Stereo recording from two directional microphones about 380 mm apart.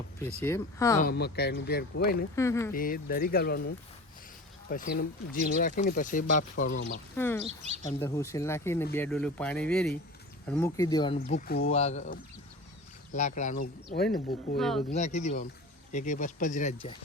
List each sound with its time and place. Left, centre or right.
0.4 s speech: centre
1.0 s speech: left
2.3 s speech: centre
2.7 s speech: left
4.7 s speech: left
7.2 s speech: centre; by 14.6 s left
14.6 s speech: centre
14.9 s speech: centre